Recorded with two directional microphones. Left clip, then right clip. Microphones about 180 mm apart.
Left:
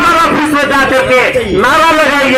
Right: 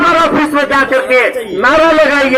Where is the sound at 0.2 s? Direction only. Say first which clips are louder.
Left 1 dB; 25° left (ahead or behind).